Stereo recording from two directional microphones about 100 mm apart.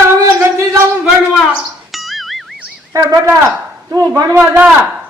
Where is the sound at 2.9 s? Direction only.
35° right (ahead or behind).